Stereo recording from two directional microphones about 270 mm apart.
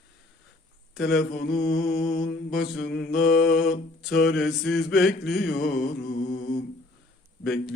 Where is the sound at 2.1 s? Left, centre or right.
Left.